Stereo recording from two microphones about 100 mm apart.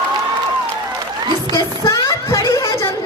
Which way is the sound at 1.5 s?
35° left (ahead or behind).